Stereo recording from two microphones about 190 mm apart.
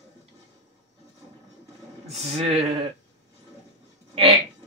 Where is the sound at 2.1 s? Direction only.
35° right (ahead or behind).